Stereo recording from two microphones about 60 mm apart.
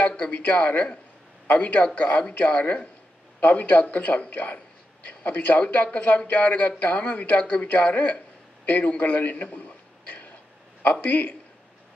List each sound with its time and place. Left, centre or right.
0.3 s a man's voice: left
10.8 s a man's voice: left